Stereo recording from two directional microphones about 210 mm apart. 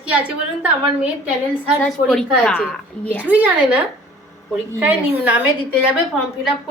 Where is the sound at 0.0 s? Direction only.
5° right (ahead or behind).